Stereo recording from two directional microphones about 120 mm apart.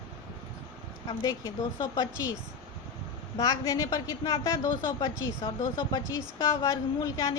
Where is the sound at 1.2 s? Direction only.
35° left (ahead or behind).